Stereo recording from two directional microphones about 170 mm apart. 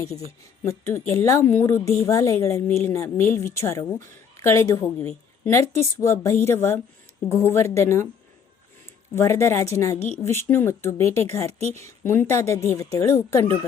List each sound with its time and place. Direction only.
0.3 s a woman's voice: 15° left (ahead or behind)
9.1 s a woman's voice: 15° left (ahead or behind)